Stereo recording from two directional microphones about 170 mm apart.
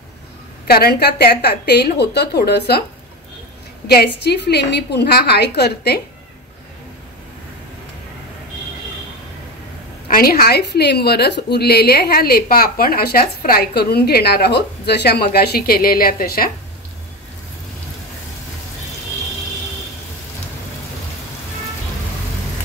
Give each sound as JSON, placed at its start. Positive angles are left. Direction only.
{"t": 0.7, "sound": "a woman's voice", "side_deg": 65}
{"t": 3.8, "sound": "a woman's voice", "side_deg": 70}
{"t": 10.0, "sound": "a woman's voice", "side_deg": 55}